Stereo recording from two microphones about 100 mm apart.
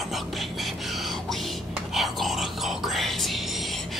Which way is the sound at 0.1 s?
Centre (ahead or behind).